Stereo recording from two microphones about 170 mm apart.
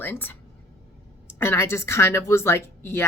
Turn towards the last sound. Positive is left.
turn(degrees=15)  # may be behind; listen again after turning